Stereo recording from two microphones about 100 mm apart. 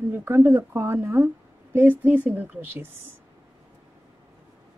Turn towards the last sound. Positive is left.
turn(degrees=-25)  # may be behind; listen again after turning